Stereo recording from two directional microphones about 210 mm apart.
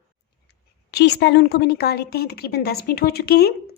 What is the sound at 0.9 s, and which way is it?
A woman's voice, 50° left (ahead or behind).